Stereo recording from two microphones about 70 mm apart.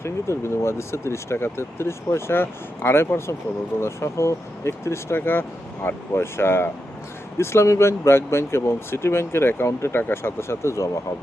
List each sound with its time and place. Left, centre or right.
0.0 s speech: left